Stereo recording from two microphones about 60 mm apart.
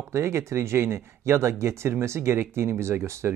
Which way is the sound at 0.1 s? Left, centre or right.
Right.